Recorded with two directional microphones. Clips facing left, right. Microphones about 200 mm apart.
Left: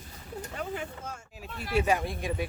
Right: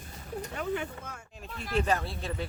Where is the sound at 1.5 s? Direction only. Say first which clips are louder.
Left 2 dB; 5° left (ahead or behind).